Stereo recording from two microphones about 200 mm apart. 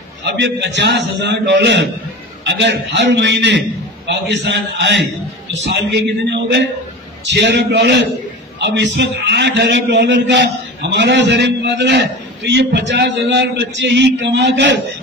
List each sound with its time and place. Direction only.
0.2 s a man's voice: 60° right (ahead or behind)